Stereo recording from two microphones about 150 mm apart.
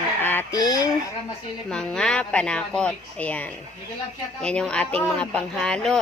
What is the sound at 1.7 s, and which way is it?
A woman's voice, 5° left (ahead or behind).